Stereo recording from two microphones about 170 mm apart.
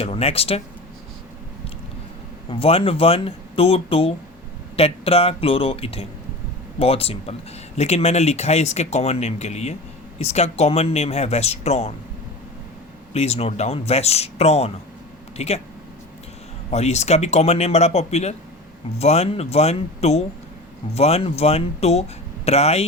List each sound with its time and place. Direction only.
0.0 s speech: 35° left (ahead or behind)
2.5 s speech: 35° left (ahead or behind)
13.1 s speech: 40° left (ahead or behind)
16.7 s speech: 40° left (ahead or behind)